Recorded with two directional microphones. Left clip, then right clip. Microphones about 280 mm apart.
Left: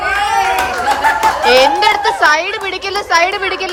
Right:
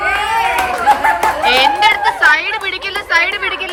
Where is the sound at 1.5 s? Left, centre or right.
Centre.